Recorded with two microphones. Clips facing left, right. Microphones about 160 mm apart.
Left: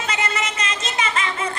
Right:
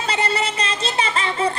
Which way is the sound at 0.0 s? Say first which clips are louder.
Right 3 dB; 30° right (ahead or behind).